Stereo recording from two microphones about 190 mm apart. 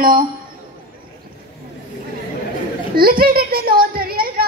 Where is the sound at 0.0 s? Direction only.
50° right (ahead or behind).